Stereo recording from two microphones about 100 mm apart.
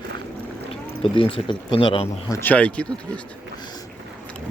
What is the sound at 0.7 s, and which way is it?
Speech, 65° left (ahead or behind).